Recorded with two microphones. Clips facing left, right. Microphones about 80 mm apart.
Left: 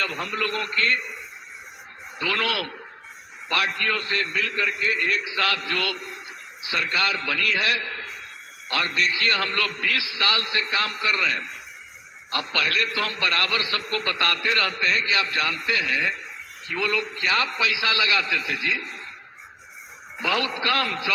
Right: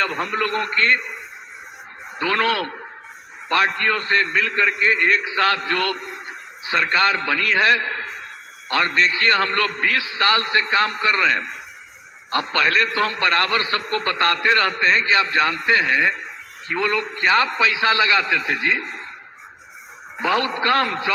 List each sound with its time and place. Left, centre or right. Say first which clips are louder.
0.0 s a man's voice: right 5 dB; right
2.1 s a man's voice: right 6 dB; right
20.1 s a man's voice: right 5 dB; right